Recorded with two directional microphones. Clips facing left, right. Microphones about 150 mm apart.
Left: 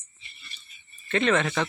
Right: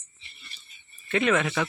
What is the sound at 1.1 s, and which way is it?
Speech, 10° right (ahead or behind).